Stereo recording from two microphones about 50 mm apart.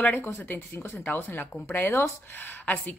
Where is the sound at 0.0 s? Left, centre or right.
Left.